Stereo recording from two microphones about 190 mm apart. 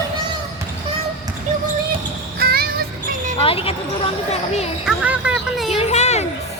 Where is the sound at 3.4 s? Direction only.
30° left (ahead or behind).